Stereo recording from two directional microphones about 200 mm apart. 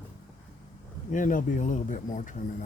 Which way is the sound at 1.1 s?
40° left (ahead or behind).